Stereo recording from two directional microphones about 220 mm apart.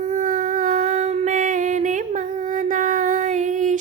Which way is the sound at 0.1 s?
35° right (ahead or behind).